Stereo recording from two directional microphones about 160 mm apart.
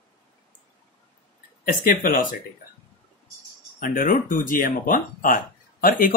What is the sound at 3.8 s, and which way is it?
Speech, 60° left (ahead or behind).